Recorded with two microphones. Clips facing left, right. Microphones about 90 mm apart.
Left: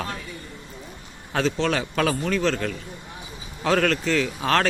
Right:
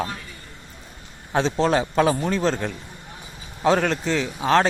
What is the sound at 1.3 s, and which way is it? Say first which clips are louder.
A man's voice: right 3 dB; 30° right (ahead or behind).